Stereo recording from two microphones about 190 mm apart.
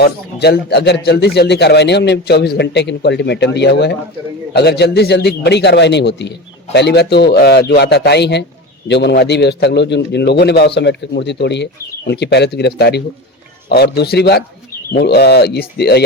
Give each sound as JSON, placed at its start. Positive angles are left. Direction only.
{"t": 0.0, "sound": "a man's voice", "side_deg": 60}